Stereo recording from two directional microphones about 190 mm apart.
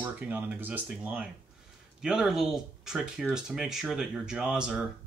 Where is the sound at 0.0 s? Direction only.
10° right (ahead or behind).